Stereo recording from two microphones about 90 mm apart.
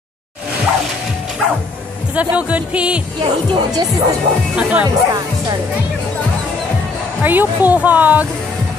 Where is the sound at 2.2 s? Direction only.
15° right (ahead or behind).